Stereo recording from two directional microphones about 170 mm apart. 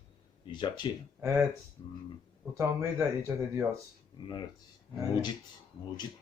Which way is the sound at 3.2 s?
15° right (ahead or behind).